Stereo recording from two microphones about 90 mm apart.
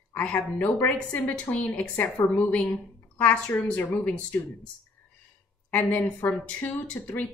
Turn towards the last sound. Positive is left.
turn(degrees=20)  # may be behind; listen again after turning